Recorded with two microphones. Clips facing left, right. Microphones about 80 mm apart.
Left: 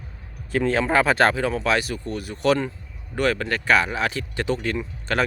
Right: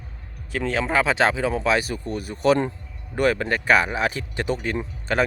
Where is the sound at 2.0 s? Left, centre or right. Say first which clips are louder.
Right 1 dB; right.